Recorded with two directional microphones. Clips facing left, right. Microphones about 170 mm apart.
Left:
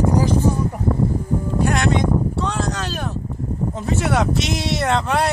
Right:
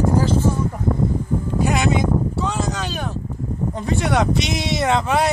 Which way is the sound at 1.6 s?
5° right (ahead or behind).